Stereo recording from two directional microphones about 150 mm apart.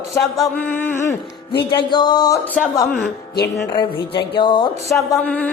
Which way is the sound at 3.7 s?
30° left (ahead or behind).